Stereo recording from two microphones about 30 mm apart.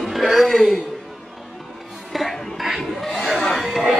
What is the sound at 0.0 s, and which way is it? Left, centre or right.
Music, centre.